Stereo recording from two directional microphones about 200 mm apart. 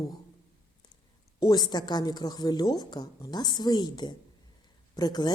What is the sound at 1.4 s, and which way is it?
A woman's voice, 20° left (ahead or behind).